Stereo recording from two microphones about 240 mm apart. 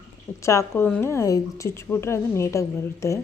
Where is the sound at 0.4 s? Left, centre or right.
Centre.